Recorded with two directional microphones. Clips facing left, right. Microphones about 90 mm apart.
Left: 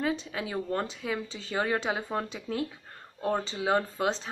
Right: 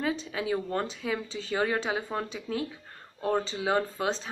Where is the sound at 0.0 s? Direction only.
30° left (ahead or behind).